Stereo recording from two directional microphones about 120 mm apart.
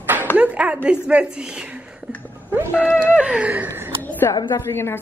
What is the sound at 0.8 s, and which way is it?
Speech, 10° right (ahead or behind).